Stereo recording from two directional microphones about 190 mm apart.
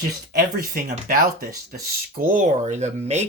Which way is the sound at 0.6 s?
50° right (ahead or behind).